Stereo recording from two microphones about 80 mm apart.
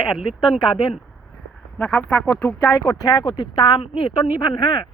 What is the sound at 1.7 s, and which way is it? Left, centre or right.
Music, centre.